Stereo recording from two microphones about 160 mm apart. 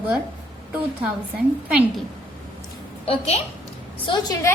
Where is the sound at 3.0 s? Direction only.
40° left (ahead or behind).